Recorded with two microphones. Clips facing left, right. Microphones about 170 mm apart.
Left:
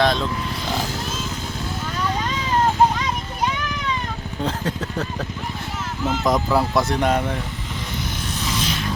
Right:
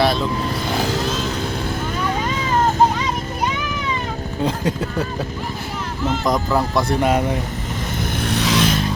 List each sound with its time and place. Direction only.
0.0 s vehicle: 5° right (ahead or behind)
0.8 s wild animals: 75° right (ahead or behind)
4.4 s speech: 10° right (ahead or behind)
6.1 s speech: centre (ahead or behind)
8.2 s vehicle: 70° right (ahead or behind)